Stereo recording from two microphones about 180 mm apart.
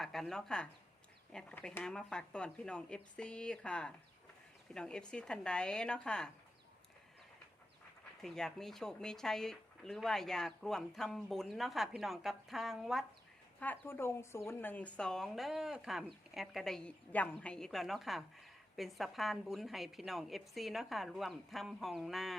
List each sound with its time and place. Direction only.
0.0 s speech: centre (ahead or behind)
8.2 s speech: centre (ahead or behind)
13.6 s speech: 10° left (ahead or behind)